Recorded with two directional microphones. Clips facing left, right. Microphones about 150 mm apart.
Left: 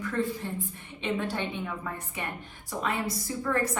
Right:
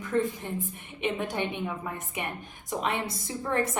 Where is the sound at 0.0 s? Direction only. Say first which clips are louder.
Right 2 dB; 20° right (ahead or behind).